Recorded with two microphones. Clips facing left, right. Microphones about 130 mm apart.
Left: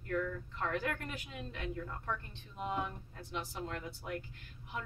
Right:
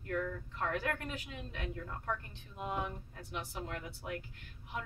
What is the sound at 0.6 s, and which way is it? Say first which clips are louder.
Speech: right 1 dB; centre (ahead or behind).